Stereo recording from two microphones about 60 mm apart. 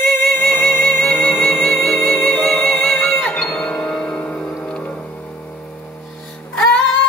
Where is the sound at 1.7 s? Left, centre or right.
Centre.